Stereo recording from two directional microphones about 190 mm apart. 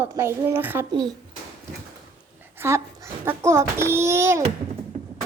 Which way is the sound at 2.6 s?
15° right (ahead or behind).